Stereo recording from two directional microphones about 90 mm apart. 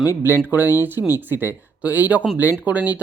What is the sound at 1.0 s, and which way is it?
Speech, 40° left (ahead or behind).